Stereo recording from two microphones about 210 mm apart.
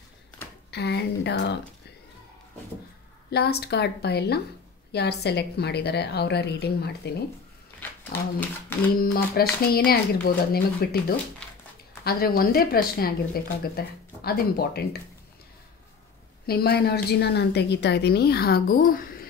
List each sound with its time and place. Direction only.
0.7 s speech: 50° left (ahead or behind)
3.3 s speech: 50° left (ahead or behind)
8.1 s speech: 10° left (ahead or behind)
8.9 s speech: 45° left (ahead or behind)
16.4 s speech: 50° left (ahead or behind)